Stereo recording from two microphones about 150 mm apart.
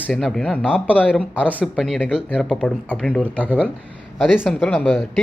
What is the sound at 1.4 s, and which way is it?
Speech, 10° right (ahead or behind).